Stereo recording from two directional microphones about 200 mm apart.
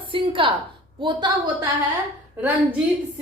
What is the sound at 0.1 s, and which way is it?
A woman's voice, 25° right (ahead or behind).